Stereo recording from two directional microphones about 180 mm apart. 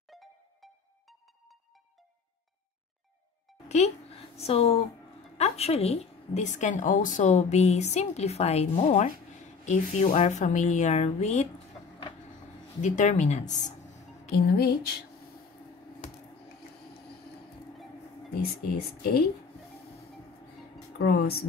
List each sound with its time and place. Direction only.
0.1 s music: centre (ahead or behind)
3.6 s a woman's voice: 40° left (ahead or behind)
12.8 s a woman's voice: 40° left (ahead or behind)
14.3 s speech: 60° left (ahead or behind)
18.4 s speech: 60° left (ahead or behind)
21.0 s speech: 60° left (ahead or behind)